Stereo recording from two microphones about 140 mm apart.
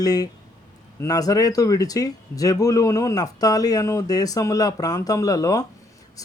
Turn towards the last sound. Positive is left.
turn(degrees=25)  # may be behind; listen again after turning